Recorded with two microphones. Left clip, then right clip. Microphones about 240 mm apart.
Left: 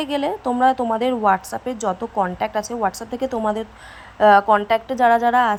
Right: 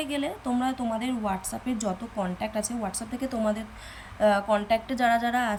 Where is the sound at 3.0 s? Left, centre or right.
Centre.